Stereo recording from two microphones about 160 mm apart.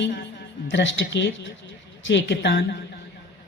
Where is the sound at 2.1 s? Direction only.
90° left.